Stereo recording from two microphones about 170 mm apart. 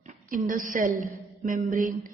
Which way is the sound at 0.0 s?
50° right (ahead or behind).